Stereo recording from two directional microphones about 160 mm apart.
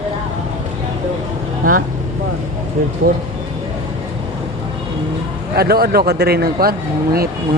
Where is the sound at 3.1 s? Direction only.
65° right (ahead or behind).